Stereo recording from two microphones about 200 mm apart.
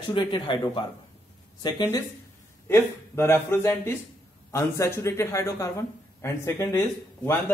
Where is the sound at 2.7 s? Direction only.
10° left (ahead or behind).